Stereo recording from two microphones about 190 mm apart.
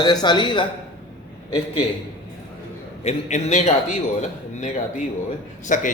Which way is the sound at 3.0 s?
35° left (ahead or behind).